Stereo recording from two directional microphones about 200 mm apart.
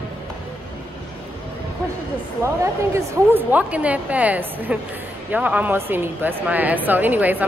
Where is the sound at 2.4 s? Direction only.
15° right (ahead or behind).